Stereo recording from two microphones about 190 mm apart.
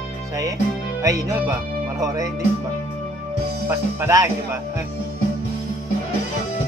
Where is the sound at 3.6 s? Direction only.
15° right (ahead or behind).